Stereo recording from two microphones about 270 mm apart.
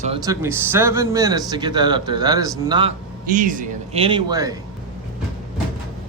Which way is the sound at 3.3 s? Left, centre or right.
Right.